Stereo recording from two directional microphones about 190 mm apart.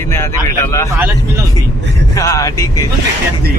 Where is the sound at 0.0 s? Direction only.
15° left (ahead or behind).